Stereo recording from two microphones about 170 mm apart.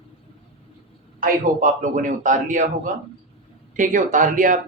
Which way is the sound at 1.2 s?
50° right (ahead or behind).